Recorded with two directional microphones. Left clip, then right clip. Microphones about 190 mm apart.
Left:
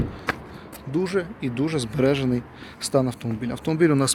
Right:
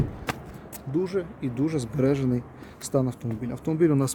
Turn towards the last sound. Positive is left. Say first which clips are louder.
# left 3 dB
turn(degrees=-10)  # may be behind; listen again after turning